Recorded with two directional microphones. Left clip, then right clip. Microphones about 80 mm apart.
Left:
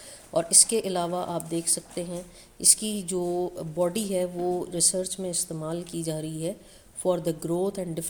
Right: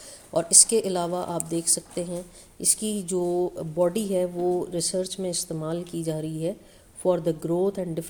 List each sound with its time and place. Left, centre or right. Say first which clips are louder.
0.3 s a woman's voice: right 2 dB; right